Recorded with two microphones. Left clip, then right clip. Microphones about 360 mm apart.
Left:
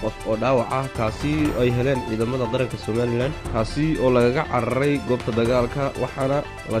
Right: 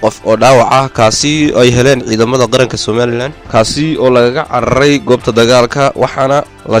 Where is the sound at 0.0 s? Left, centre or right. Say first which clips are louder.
Right 15 dB; right.